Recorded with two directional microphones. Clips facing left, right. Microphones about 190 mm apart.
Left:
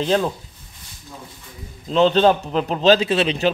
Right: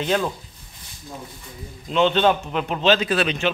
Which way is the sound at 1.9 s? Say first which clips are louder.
Left 3 dB; 35° left (ahead or behind).